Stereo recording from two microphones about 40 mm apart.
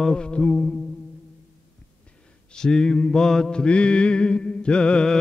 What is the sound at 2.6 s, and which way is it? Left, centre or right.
Mantra, centre.